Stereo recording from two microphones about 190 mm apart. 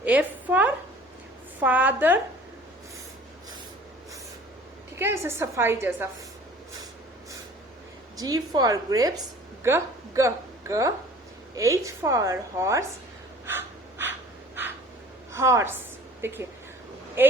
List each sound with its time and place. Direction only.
0.0 s a sound: 10° right (ahead or behind)
1.5 s a woman's voice: 10° right (ahead or behind)
4.9 s a woman's voice: 15° right (ahead or behind)
8.1 s a woman's voice: 20° right (ahead or behind)
13.4 s breathing: 10° right (ahead or behind)
15.3 s a woman's voice: 15° right (ahead or behind)